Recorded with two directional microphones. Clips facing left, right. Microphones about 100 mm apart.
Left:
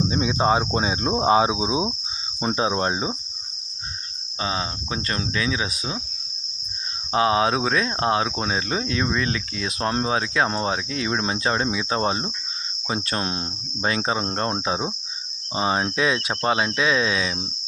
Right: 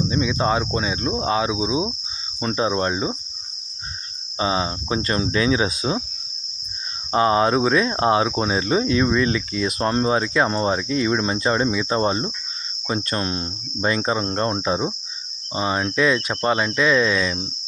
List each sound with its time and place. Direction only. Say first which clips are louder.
0.0 s cricket: even; 25° left (ahead or behind)
4.4 s speech: right 5 dB; 20° right (ahead or behind)
7.1 s cricket: right 2 dB; centre (ahead or behind)